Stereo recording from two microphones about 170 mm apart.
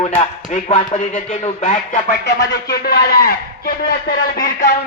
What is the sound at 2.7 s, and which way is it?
A man's voice, 65° left (ahead or behind).